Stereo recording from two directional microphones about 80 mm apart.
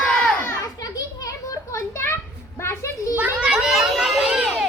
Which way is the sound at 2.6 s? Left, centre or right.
Left.